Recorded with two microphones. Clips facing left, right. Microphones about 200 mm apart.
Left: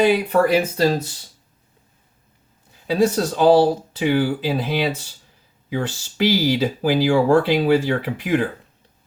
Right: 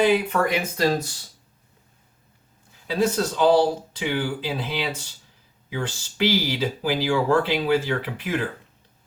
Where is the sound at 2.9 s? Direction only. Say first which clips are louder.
Left 4 dB; 45° left (ahead or behind).